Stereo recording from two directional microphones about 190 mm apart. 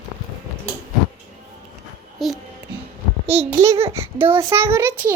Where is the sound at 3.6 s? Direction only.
40° right (ahead or behind).